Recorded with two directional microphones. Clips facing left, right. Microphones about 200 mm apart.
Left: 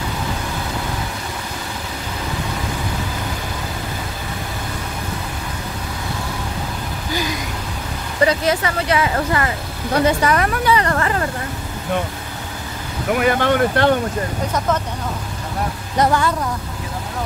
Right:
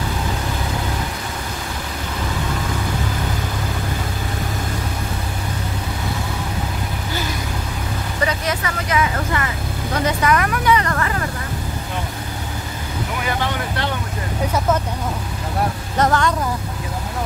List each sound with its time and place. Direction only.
8.3 s vehicle: 30° left (ahead or behind)
10.0 s speech: 30° left (ahead or behind)
13.1 s speech: 60° left (ahead or behind)
16.0 s speech: 10° left (ahead or behind)